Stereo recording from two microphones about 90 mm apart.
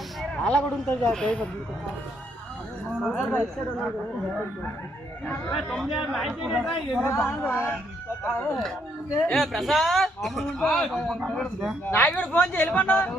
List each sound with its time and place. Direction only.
0.4 s speech: 10° left (ahead or behind)
2.9 s a man's voice: 5° right (ahead or behind)
5.5 s a man's voice: 5° left (ahead or behind)
7.1 s speech: 30° left (ahead or behind)
9.3 s a man's voice: centre (ahead or behind)
11.9 s speech: 20° left (ahead or behind)